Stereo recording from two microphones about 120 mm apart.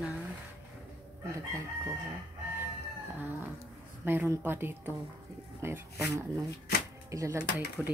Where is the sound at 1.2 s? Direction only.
25° right (ahead or behind).